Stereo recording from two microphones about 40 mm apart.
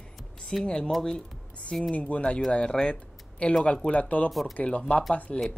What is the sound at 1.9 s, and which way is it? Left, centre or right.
Speech, left.